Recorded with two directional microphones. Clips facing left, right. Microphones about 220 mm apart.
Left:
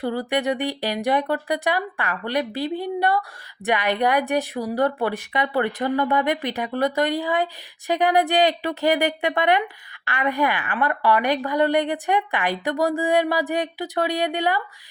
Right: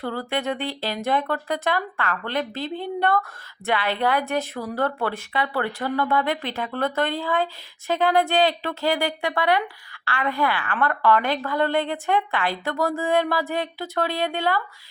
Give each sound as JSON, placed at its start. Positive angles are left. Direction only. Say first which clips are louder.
{"t": 0.0, "sound": "a woman's voice", "louder": "left 3 dB", "side_deg": 15}